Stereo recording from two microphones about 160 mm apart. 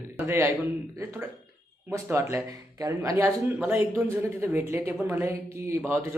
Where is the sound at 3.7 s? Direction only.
10° right (ahead or behind).